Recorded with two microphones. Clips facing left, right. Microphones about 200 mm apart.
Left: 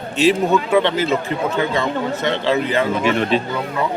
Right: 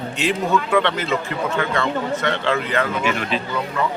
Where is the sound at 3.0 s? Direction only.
30° left (ahead or behind).